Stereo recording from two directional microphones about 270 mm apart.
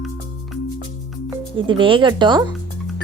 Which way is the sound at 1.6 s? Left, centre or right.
Centre.